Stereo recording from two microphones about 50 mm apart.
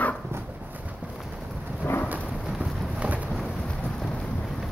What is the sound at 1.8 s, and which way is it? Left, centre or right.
Thunder, left.